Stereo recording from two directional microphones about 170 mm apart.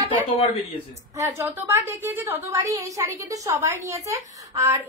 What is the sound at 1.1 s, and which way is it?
A woman's voice, 15° right (ahead or behind).